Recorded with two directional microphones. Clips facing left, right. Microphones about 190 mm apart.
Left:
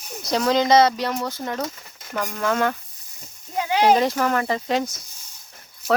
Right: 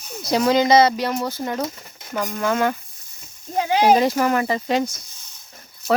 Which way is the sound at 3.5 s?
25° right (ahead or behind).